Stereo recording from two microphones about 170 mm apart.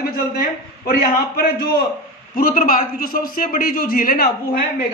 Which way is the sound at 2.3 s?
55° left (ahead or behind).